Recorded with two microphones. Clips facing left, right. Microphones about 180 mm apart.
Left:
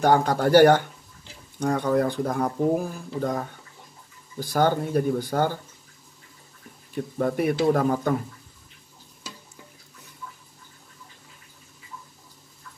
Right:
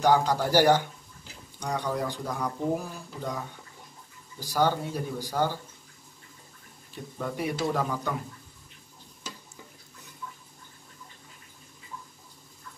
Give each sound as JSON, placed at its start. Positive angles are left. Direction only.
{"t": 0.0, "sound": "speech", "side_deg": 55}
{"t": 7.2, "sound": "speech", "side_deg": 55}